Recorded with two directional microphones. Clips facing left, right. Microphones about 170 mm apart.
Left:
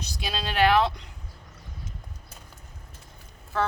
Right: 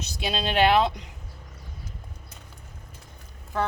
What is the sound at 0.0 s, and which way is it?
Speech, 25° right (ahead or behind).